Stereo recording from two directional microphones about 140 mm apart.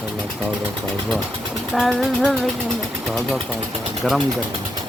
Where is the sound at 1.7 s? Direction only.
Centre (ahead or behind).